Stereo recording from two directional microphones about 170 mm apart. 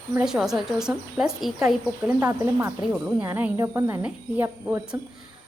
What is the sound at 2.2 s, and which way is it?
A woman's voice, 15° right (ahead or behind).